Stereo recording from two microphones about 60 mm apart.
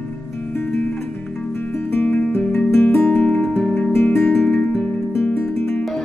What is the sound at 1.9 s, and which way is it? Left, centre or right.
Music, left.